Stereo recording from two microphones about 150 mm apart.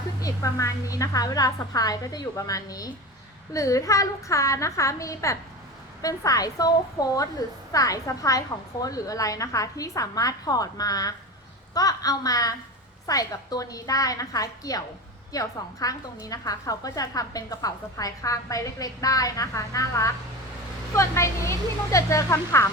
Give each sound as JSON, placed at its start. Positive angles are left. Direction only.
{"t": 0.2, "sound": "a woman's voice", "side_deg": 20}